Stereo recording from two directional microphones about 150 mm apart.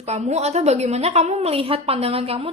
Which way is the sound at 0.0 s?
45° right (ahead or behind).